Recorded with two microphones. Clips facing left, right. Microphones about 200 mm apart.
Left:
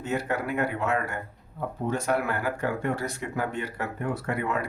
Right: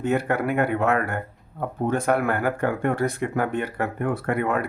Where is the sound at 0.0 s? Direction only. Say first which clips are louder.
Right 6 dB; 60° right (ahead or behind).